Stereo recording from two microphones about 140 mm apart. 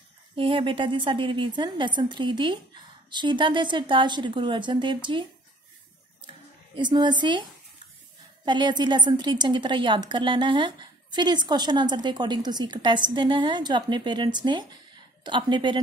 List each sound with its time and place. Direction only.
0.4 s a woman's voice: 40° right (ahead or behind)
6.2 s a sound: 35° right (ahead or behind)
8.5 s a woman's voice: 35° right (ahead or behind)